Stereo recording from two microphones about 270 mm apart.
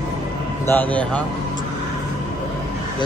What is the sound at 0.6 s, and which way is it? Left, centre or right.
Speech, centre.